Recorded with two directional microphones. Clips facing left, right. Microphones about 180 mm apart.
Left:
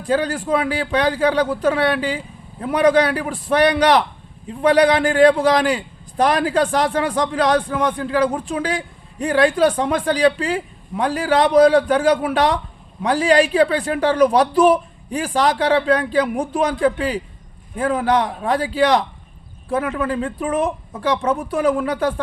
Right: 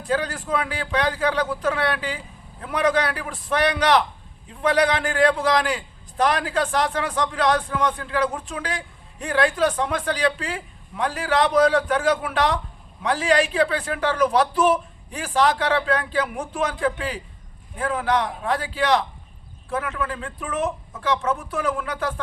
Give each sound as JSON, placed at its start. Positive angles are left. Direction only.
{"t": 0.1, "sound": "a man's voice", "side_deg": 30}